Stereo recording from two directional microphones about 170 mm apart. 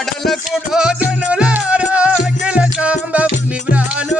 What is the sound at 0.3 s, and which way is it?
Music, 5° right (ahead or behind).